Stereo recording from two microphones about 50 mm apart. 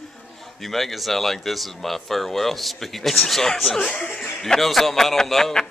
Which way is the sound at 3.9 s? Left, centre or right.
Left.